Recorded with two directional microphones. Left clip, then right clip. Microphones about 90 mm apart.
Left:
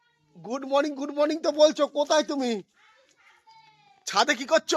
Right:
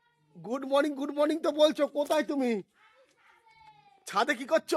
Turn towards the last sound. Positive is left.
turn(degrees=25)  # may be behind; listen again after turning